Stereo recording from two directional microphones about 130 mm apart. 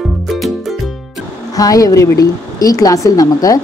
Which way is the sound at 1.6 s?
25° left (ahead or behind).